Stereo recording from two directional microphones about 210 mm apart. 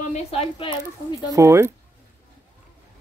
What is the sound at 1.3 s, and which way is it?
Speech, 15° right (ahead or behind).